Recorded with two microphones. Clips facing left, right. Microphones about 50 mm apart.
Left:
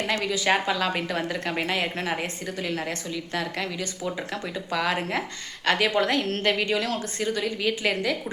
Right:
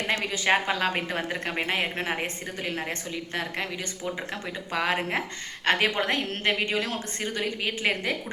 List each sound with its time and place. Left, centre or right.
0.1 s a woman's voice: right